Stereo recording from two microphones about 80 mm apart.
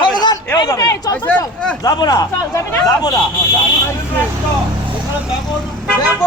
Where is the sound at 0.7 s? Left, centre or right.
Left.